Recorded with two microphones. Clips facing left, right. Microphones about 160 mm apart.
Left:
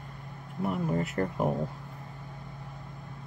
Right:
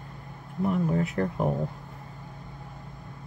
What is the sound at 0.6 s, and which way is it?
Speech, 5° left (ahead or behind).